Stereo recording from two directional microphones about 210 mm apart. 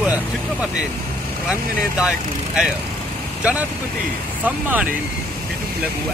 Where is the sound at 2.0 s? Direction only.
5° right (ahead or behind).